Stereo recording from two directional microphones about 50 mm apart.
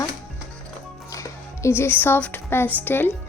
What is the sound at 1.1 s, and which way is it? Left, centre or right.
Music, left.